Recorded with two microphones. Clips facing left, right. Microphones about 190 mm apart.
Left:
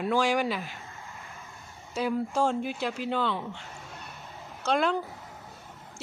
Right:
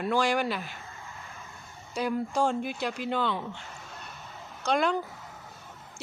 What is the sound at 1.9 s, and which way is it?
Speech, 5° left (ahead or behind).